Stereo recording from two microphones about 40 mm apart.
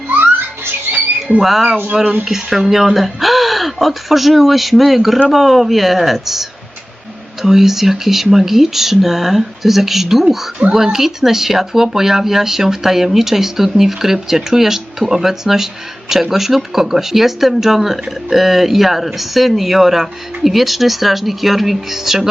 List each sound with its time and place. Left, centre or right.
1.4 s speech: centre
10.6 s speech: right
10.9 s speech: centre